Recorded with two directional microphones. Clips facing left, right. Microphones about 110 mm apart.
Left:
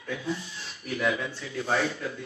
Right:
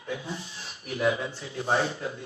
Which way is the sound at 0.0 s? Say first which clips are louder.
Left 2 dB; 25° right (ahead or behind).